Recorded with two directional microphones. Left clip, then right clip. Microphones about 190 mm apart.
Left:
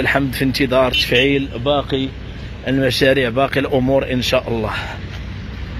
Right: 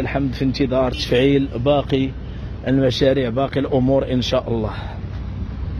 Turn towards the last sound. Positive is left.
turn(degrees=-5)  # may be behind; listen again after turning